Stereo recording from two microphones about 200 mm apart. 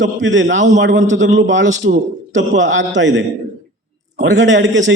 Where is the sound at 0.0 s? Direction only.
65° right (ahead or behind).